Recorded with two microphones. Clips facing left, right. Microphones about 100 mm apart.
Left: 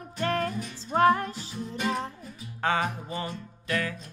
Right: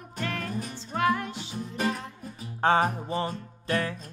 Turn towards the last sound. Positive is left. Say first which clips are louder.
# right 2 dB
turn(degrees=-35)  # may be behind; listen again after turning